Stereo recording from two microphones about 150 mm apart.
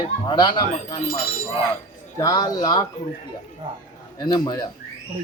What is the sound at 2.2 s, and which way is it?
Speech, 25° left (ahead or behind).